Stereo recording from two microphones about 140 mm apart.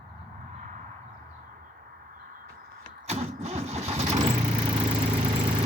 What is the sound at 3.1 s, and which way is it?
Vehicle, 50° right (ahead or behind).